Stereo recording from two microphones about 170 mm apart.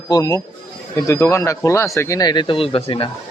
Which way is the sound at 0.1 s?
20° left (ahead or behind).